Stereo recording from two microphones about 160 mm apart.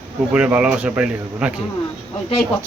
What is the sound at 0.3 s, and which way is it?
Speech, 5° right (ahead or behind).